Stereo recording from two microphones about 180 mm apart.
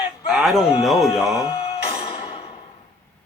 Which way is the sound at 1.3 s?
25° left (ahead or behind).